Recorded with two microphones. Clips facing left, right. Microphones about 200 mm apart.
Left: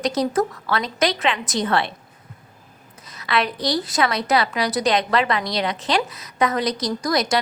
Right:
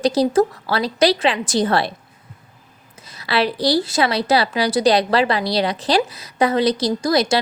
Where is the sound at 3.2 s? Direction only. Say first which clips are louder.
Right 4 dB; 30° right (ahead or behind).